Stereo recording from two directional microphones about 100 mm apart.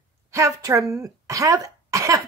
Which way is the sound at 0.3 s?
30° right (ahead or behind).